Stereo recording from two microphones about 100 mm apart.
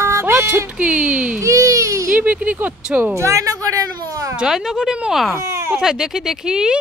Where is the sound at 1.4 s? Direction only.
30° right (ahead or behind).